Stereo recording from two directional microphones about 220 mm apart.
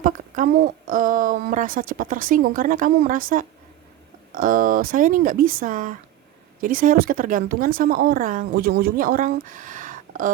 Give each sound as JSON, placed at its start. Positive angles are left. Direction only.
{"t": 0.0, "sound": "speech", "side_deg": -40}